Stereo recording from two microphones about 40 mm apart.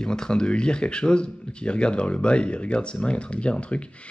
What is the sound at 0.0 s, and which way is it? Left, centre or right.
Speech, centre.